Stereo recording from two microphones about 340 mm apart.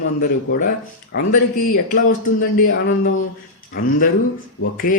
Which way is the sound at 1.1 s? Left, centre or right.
Left.